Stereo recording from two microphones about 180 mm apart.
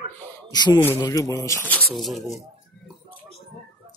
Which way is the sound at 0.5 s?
25° left (ahead or behind).